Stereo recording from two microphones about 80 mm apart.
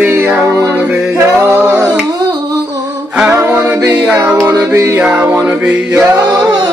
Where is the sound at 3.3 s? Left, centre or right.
Right.